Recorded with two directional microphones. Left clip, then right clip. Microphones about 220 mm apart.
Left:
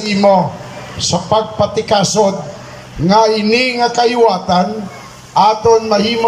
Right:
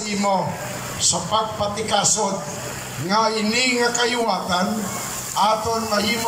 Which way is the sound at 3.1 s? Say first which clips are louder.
Left 9 dB; 50° left (ahead or behind).